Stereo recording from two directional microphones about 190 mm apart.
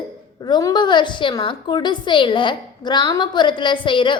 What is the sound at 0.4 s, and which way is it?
A woman's voice, 20° left (ahead or behind).